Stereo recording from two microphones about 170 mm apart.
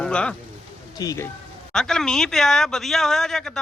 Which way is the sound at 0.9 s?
20° left (ahead or behind).